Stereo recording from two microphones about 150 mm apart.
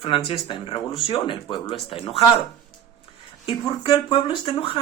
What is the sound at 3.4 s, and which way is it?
Speech, 35° left (ahead or behind).